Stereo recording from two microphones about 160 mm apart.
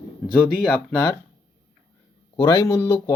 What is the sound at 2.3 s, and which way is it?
Speech, 25° left (ahead or behind).